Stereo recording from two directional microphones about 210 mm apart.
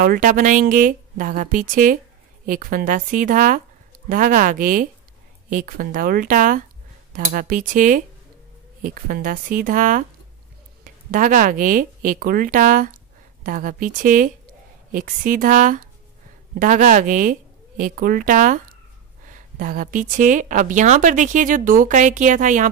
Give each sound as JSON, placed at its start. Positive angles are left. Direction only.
{"t": 0.0, "sound": "a woman's voice", "side_deg": -40}